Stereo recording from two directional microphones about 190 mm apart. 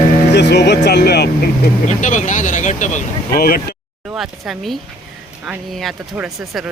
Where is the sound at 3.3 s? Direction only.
55° left (ahead or behind).